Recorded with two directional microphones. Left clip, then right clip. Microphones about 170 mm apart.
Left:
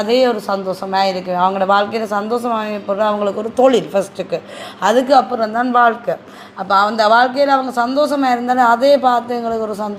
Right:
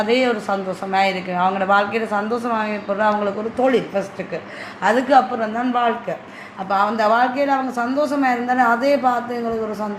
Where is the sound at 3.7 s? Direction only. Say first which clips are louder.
Left 4 dB; 50° left (ahead or behind).